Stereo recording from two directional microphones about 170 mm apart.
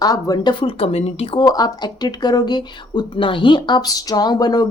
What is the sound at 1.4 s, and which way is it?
A woman's voice, 20° left (ahead or behind).